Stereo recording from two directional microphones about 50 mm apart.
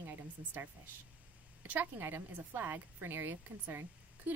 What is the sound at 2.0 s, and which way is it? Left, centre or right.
Speech, right.